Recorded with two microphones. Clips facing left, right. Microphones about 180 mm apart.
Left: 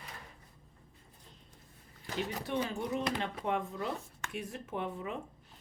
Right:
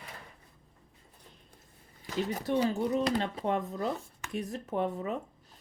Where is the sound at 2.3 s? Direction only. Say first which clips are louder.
Right 8 dB; 35° right (ahead or behind).